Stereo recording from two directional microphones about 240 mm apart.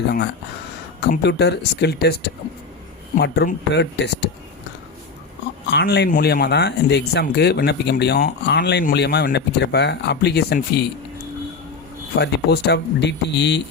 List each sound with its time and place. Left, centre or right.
1.1 s speech: left
5.7 s speech: left
12.1 s speech: left